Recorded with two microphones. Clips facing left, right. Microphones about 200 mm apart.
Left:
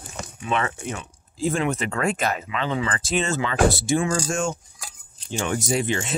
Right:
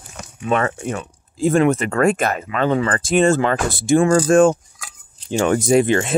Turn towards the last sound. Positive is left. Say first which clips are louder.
# right 9 dB
turn(degrees=-55)  # may be behind; listen again after turning